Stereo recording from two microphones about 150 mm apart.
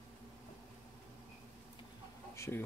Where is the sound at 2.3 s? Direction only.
20° left (ahead or behind).